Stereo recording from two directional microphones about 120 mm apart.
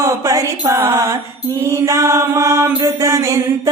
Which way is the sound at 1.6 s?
25° right (ahead or behind).